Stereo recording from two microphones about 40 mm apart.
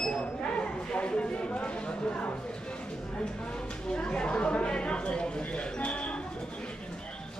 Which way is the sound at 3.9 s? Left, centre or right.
Left.